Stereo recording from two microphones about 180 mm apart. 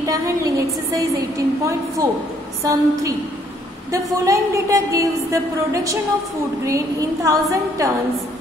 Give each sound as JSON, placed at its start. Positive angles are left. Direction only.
{"t": 0.0, "sound": "a woman's voice", "side_deg": -20}